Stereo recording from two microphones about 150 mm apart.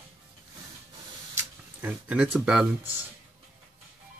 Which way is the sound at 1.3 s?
10° right (ahead or behind).